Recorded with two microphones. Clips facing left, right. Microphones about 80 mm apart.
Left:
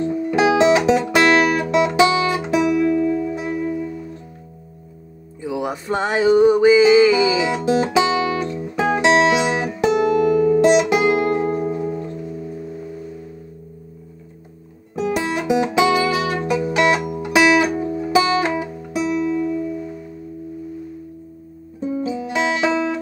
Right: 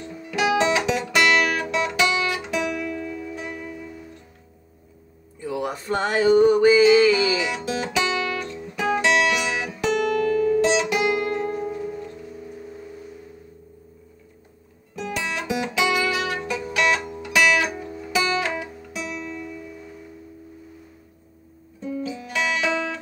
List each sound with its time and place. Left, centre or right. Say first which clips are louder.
0.0 s guitar: left 8 dB; left
5.4 s music: left 3 dB; centre; by 9.7 s left
9.7 s music: left 4 dB; centre
11.0 s guitar: left 5 dB; left
11.5 s music: left 6 dB; left
15.5 s music: left 7 dB; left
19.1 s music: left 13 dB; centre
21.9 s music: left 5 dB; left